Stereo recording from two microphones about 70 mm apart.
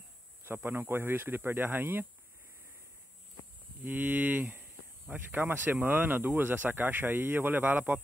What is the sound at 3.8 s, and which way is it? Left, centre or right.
Speech, right.